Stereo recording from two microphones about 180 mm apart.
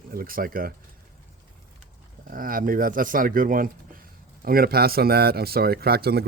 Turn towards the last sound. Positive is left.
turn(degrees=-60)  # may be behind; listen again after turning